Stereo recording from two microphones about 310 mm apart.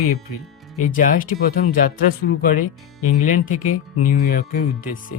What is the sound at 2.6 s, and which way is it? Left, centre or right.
Speech, left.